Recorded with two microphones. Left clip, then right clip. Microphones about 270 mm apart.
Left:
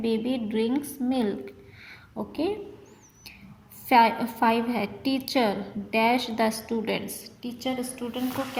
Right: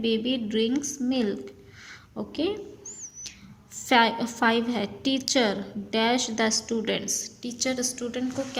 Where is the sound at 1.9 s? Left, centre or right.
Right.